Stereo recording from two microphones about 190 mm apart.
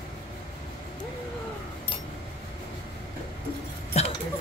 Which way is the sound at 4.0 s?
35° left (ahead or behind).